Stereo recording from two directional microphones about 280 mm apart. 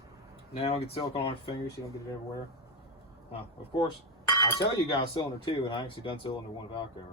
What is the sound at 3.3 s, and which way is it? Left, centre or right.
Speech, centre.